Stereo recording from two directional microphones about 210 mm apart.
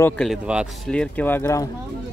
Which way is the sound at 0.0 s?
5° left (ahead or behind).